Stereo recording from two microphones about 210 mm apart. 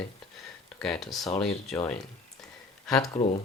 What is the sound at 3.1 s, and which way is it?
Speech, 30° left (ahead or behind).